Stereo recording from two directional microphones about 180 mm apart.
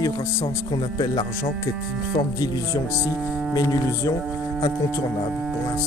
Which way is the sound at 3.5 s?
20° left (ahead or behind).